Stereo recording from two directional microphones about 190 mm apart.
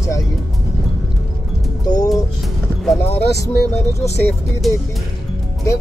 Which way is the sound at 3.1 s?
15° left (ahead or behind).